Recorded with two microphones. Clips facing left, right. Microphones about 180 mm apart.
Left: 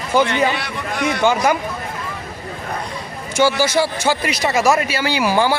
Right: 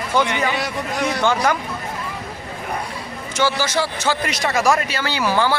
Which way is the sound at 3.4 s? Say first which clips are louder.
Left 4 dB; 10° left (ahead or behind).